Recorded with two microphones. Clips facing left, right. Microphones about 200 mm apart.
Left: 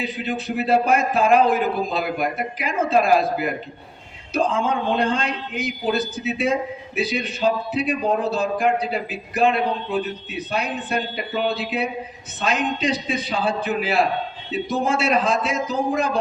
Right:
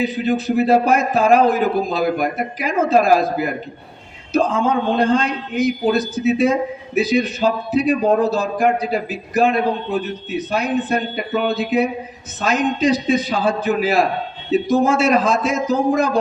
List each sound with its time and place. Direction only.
0.0 s a man's voice: 40° right (ahead or behind)
4.3 s a man's voice: 40° right (ahead or behind)